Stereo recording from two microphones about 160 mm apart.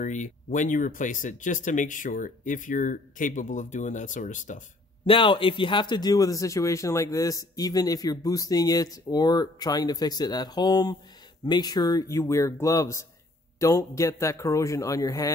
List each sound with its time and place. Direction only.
0.0 s speech: 50° left (ahead or behind)
5.0 s speech: 35° left (ahead or behind)